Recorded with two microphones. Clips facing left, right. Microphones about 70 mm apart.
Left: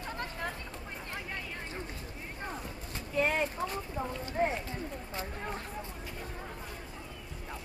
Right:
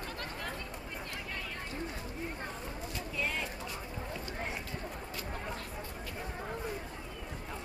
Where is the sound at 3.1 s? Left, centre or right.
Left.